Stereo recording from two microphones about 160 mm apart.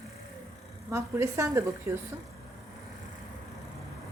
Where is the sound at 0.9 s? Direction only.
15° right (ahead or behind).